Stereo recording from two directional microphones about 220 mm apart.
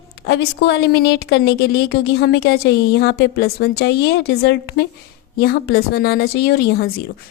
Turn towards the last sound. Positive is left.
turn(degrees=45)  # may be behind; listen again after turning